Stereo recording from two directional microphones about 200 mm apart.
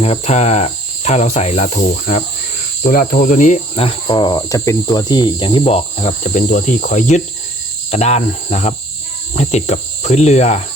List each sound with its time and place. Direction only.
0.0 s cricket: 35° left (ahead or behind)